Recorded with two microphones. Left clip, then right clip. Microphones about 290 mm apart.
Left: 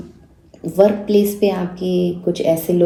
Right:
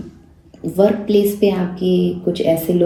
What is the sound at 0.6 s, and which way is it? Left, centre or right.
Speech, left.